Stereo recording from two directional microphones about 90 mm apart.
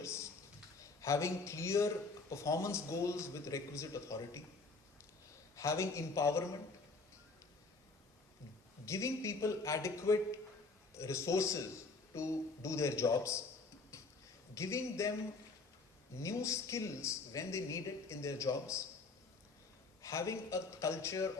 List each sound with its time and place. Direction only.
0.0 s a sound: 35° left (ahead or behind)
0.8 s a man's voice: 35° left (ahead or behind)
5.5 s speech: 35° left (ahead or behind)
8.9 s speech: 35° left (ahead or behind)
13.9 s tick-tock: 30° left (ahead or behind)
14.5 s speech: 35° left (ahead or behind)
16.1 s speech: 35° left (ahead or behind)
20.0 s speech: 35° left (ahead or behind)